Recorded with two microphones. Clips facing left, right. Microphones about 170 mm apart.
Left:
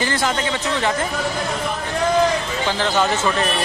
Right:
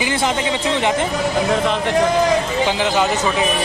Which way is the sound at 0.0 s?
20° right (ahead or behind).